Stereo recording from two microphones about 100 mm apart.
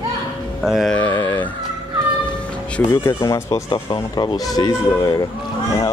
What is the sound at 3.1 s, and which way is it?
Speech, 35° left (ahead or behind).